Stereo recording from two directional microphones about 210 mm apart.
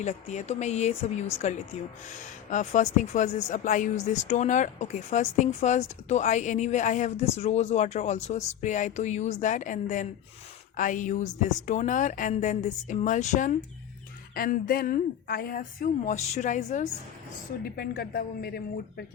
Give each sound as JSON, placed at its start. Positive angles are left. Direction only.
{"t": 0.0, "sound": "speech", "side_deg": 35}
{"t": 17.6, "sound": "speech", "side_deg": 45}